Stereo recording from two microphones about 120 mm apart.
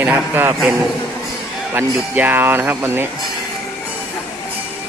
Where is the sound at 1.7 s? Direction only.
15° right (ahead or behind).